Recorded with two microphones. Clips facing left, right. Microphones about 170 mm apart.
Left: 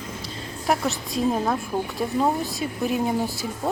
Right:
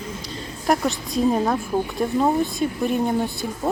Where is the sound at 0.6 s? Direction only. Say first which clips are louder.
Right 3 dB; centre (ahead or behind).